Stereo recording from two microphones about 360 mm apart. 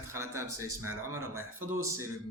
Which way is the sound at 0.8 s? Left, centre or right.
Right.